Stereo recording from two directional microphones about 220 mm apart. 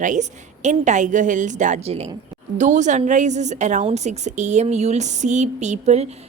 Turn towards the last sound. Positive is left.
turn(degrees=-30)  # may be behind; listen again after turning